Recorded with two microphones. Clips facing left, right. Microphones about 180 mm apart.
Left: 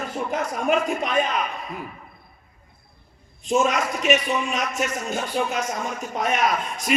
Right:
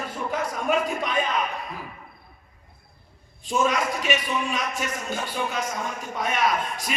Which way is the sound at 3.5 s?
45° left (ahead or behind).